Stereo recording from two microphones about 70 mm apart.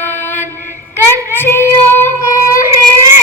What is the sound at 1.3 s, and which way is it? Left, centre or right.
Child singing, left.